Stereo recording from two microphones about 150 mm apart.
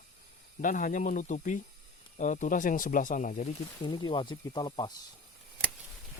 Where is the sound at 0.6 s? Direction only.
65° left (ahead or behind).